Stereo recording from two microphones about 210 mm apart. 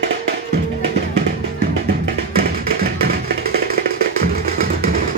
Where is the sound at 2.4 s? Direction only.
45° right (ahead or behind).